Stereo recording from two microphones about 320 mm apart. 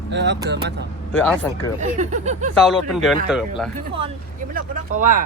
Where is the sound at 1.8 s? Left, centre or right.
Right.